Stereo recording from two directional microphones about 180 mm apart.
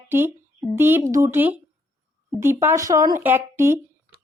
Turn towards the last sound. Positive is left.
turn(degrees=-15)  # may be behind; listen again after turning